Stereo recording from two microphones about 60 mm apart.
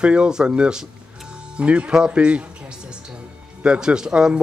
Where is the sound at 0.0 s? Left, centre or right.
Centre.